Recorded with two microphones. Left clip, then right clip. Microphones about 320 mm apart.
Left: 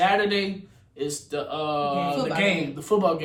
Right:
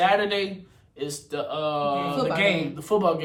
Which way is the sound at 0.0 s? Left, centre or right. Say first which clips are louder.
Even; centre.